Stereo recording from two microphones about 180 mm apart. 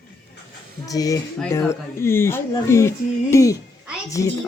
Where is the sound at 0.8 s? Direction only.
20° left (ahead or behind).